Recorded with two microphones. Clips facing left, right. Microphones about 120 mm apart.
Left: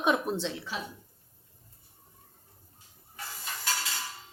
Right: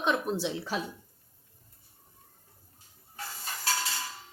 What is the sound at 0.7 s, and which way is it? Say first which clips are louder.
Speech: right 4 dB; 45° right (ahead or behind).